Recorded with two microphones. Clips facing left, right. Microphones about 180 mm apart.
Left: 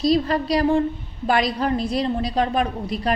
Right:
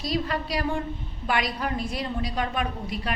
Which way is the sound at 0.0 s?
35° left (ahead or behind).